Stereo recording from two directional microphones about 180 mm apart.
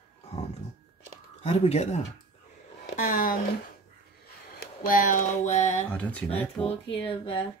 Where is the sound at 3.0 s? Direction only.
55° left (ahead or behind).